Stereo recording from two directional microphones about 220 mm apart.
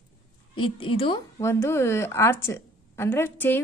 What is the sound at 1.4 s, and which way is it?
Speech, 10° left (ahead or behind).